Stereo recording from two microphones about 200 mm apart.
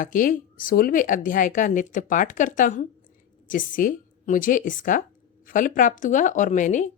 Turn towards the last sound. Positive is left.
turn(degrees=40)  # may be behind; listen again after turning